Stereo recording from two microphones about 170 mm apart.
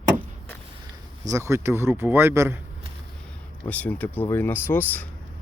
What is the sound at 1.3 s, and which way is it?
Speech, 15° right (ahead or behind).